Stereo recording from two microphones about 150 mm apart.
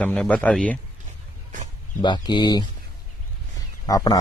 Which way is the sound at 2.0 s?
30° left (ahead or behind).